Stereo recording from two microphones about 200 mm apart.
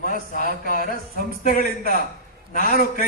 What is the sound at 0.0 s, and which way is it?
A man's voice, 45° left (ahead or behind).